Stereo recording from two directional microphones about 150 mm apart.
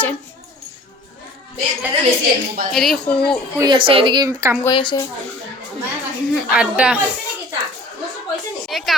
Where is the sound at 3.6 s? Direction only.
30° right (ahead or behind).